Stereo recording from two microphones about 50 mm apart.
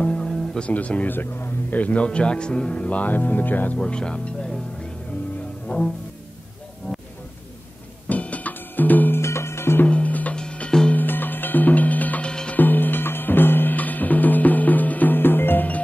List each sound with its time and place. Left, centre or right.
0.0 s music: centre
0.7 s speech: left
1.0 s speech: left
3.8 s speech: centre
5.7 s cello: left
6.9 s music: left
8.1 s music: left
9.1 s music: left
9.8 s music: left
10.9 s music: left
12.3 s music: left
12.5 s music: left